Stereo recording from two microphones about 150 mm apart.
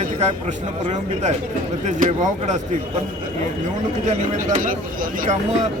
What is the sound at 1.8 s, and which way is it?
Speech, 55° right (ahead or behind).